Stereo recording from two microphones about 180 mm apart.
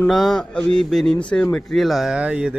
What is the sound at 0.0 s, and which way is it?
Speech, centre (ahead or behind).